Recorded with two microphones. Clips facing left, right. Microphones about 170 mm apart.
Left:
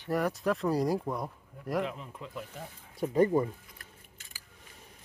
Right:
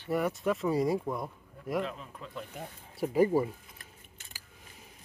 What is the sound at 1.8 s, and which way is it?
Speech, 15° left (ahead or behind).